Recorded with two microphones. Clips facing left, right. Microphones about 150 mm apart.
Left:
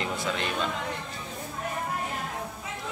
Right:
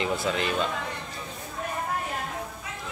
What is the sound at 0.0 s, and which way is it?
Speech, 5° right (ahead or behind).